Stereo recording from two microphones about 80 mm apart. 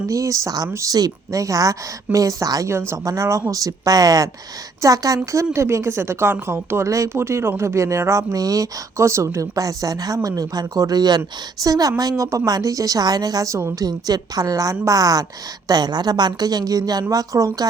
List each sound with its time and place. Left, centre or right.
0.1 s a woman's voice: right
2.7 s a woman's voice: right